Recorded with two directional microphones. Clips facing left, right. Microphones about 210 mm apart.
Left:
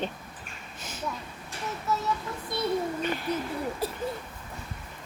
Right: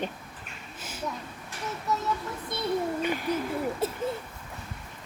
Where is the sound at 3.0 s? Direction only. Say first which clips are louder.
Right 1 dB; 10° right (ahead or behind).